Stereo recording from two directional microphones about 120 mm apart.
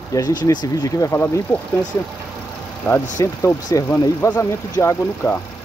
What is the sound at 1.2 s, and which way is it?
Speech, 15° left (ahead or behind).